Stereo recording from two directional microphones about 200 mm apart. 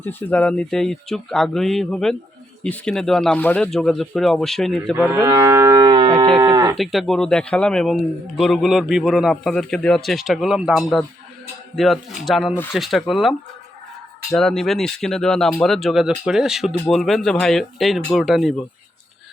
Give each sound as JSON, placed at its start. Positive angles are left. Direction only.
{"t": 0.0, "sound": "speech", "side_deg": 10}
{"t": 5.0, "sound": "livestock", "side_deg": -15}
{"t": 6.7, "sound": "speech", "side_deg": 0}
{"t": 14.3, "sound": "speech", "side_deg": 0}